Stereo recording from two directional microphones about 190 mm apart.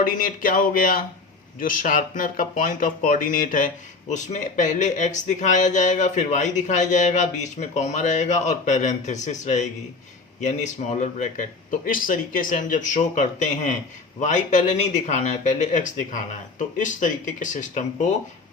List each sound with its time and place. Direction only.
0.0 s speech: 45° left (ahead or behind)